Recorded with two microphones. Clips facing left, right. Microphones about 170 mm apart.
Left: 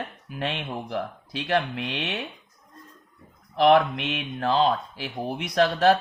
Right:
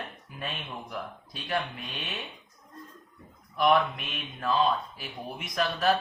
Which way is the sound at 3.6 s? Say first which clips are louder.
Left 5 dB; 70° left (ahead or behind).